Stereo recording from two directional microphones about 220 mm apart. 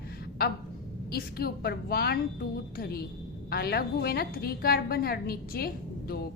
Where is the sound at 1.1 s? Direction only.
45° left (ahead or behind).